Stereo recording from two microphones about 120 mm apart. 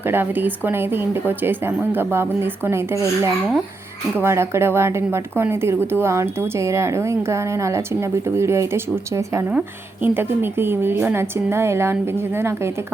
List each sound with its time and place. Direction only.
0.0 s speech: 20° right (ahead or behind)
4.2 s speech: 20° right (ahead or behind)
9.5 s speech: 15° right (ahead or behind)